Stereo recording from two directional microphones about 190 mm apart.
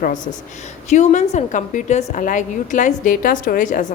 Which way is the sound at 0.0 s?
45° left (ahead or behind).